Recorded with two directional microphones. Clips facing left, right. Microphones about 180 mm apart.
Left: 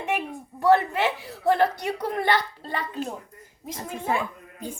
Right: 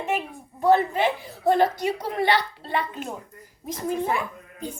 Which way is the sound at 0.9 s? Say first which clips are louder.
Right 2 dB; 75° left (ahead or behind).